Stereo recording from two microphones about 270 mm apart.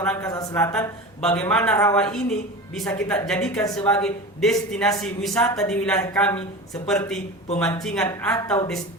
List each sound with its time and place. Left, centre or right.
0.0 s a man's voice: centre